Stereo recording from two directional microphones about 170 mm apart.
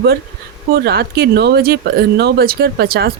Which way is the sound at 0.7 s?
70° right (ahead or behind).